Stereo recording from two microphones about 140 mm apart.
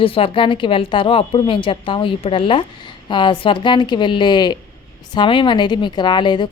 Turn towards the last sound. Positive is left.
turn(degrees=35)  # may be behind; listen again after turning